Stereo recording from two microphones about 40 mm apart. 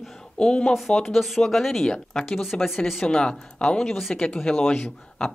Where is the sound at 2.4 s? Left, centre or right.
Centre.